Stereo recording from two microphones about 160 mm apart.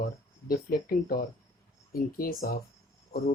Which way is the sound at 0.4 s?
70° left (ahead or behind).